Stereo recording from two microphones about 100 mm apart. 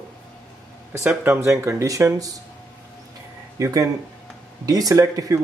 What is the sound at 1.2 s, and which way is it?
Speech, 25° right (ahead or behind).